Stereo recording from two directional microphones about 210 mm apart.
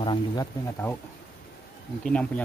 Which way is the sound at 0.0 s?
20° left (ahead or behind).